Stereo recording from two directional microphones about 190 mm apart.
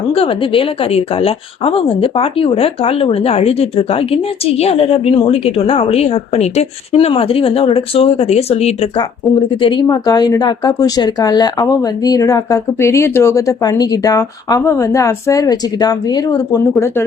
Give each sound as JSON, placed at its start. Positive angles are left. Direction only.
{"t": 0.1, "sound": "speech", "side_deg": 30}